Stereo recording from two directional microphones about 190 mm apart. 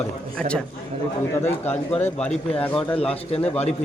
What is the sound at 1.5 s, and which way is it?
Speech, 35° left (ahead or behind).